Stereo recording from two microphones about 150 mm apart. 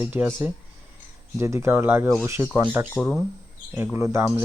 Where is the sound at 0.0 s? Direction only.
15° right (ahead or behind).